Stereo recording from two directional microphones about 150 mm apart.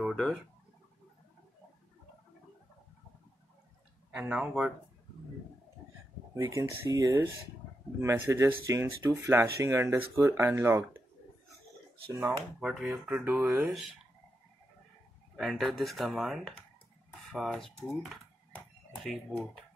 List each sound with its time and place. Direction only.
0.1 s speech: centre (ahead or behind)
4.1 s speech: 10° right (ahead or behind)
6.3 s speech: 20° right (ahead or behind)
12.3 s speech: centre (ahead or behind)
15.3 s speech: centre (ahead or behind)